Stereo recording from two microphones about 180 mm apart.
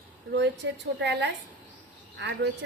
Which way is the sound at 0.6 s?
85° right.